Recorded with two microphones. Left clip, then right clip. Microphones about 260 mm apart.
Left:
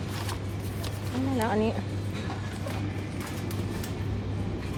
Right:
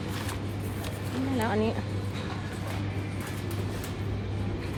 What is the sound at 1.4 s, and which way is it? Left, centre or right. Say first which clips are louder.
Speech: left 1 dB; centre.